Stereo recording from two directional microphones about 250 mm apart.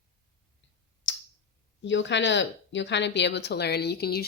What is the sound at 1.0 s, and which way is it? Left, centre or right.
Tick-tock, left.